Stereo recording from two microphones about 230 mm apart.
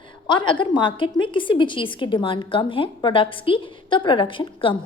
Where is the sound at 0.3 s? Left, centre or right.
Left.